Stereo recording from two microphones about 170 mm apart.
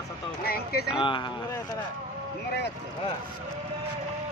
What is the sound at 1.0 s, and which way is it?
Speech, 30° left (ahead or behind).